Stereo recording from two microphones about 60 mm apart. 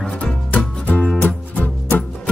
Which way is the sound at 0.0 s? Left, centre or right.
Centre.